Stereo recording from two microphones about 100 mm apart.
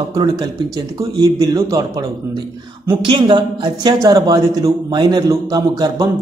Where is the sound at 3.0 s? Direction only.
55° right (ahead or behind).